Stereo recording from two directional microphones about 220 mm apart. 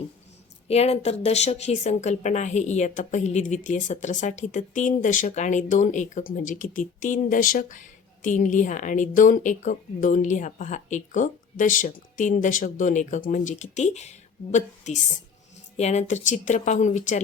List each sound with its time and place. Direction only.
0.7 s speech: 30° left (ahead or behind)